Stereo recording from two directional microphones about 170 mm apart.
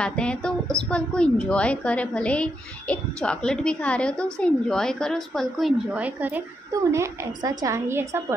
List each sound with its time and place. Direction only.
0.0 s a woman's voice: 5° left (ahead or behind); by 8.2 s 15° right (ahead or behind)